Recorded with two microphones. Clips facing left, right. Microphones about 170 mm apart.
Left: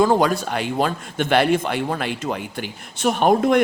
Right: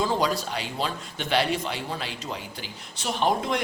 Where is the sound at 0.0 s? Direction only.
55° left (ahead or behind).